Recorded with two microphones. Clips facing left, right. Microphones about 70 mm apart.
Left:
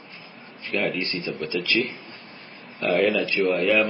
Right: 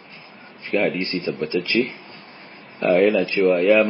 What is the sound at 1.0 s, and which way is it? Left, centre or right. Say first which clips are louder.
Speech: right 4 dB; right.